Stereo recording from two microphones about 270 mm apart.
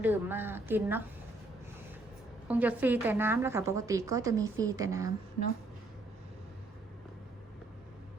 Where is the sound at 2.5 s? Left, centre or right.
Centre.